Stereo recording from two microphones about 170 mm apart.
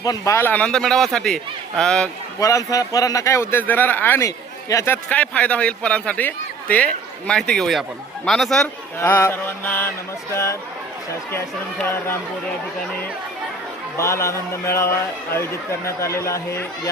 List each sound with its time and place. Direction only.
0.0 s a man's voice: 20° left (ahead or behind); by 2.0 s 5° left (ahead or behind)
2.4 s speech: 20° left (ahead or behind); by 8.7 s centre (ahead or behind)
9.0 s speech: 15° left (ahead or behind)
13.9 s speech: 15° left (ahead or behind)